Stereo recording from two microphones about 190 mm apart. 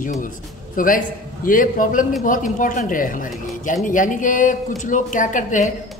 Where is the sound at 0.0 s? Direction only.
45° left (ahead or behind).